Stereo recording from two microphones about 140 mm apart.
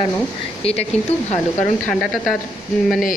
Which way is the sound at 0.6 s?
45° left (ahead or behind).